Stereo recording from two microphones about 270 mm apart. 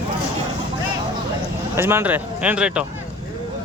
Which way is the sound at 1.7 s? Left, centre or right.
Centre.